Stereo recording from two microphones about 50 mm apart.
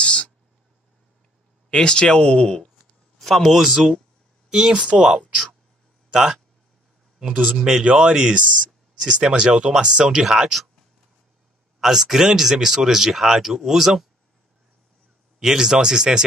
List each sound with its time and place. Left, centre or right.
0.0 s a sound: centre
1.7 s speech: centre
3.2 s speech: centre
7.5 s speech: centre
8.4 s speech: right
10.2 s speech: centre
11.8 s speech: centre
15.3 s speech: centre